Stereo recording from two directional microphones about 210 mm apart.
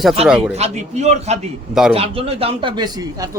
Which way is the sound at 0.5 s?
30° right (ahead or behind).